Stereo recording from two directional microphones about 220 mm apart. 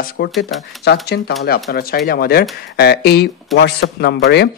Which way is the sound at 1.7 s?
45° left (ahead or behind).